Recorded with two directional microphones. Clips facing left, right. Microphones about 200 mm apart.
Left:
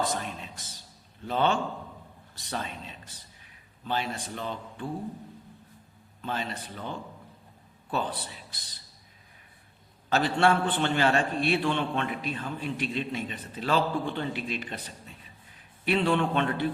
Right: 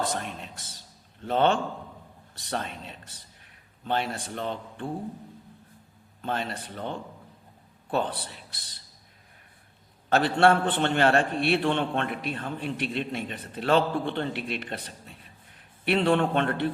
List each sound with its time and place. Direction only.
0.0 s a sound: 60° right (ahead or behind)
1.2 s a man's voice: 60° right (ahead or behind)
6.2 s a man's voice: 55° right (ahead or behind)
10.1 s a man's voice: 60° right (ahead or behind)